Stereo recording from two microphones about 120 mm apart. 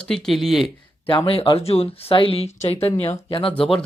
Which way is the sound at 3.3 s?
45° left (ahead or behind).